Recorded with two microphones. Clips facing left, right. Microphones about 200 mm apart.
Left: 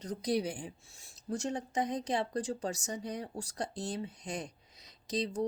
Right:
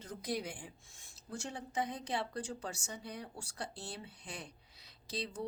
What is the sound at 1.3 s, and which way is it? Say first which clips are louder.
Speech: left 8 dB; 40° left (ahead or behind).